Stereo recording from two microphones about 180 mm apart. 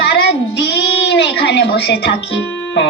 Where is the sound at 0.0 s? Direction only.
65° left (ahead or behind).